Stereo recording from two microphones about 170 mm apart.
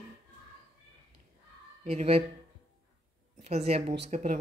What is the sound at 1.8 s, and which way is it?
Speech, 40° right (ahead or behind).